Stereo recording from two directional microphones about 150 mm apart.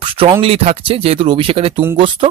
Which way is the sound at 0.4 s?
40° right (ahead or behind).